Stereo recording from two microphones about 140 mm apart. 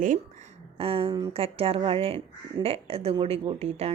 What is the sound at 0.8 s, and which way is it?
Speech, 45° right (ahead or behind).